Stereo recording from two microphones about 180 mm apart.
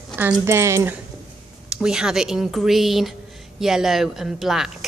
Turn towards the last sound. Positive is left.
turn(degrees=0)  # may be behind; listen again after turning